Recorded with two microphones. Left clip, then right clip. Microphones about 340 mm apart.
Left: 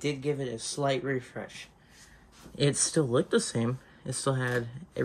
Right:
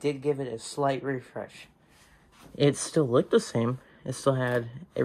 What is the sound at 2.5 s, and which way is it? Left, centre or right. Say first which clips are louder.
Speech: right 3 dB; centre.